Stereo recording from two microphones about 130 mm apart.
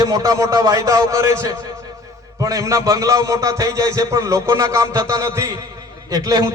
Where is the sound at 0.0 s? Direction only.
30° right (ahead or behind).